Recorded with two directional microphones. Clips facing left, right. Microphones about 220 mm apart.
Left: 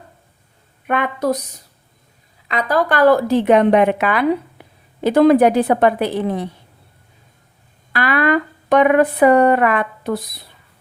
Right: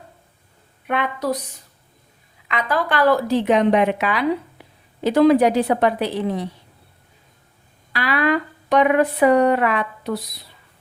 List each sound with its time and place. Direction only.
0.9 s a woman's voice: 50° left (ahead or behind)
2.5 s a woman's voice: 40° left (ahead or behind); by 6.5 s 55° left (ahead or behind)
7.9 s a woman's voice: 50° left (ahead or behind)